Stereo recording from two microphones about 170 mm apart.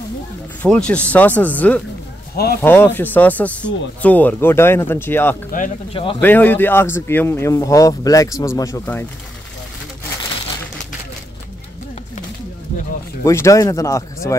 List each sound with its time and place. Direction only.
0.6 s a man's voice: 5° left (ahead or behind)
2.3 s speech: 65° left (ahead or behind)
2.6 s a man's voice: 10° left (ahead or behind)
5.9 s speech: 30° left (ahead or behind)
6.2 s a man's voice: 10° left (ahead or behind)
13.2 s a man's voice: 15° left (ahead or behind)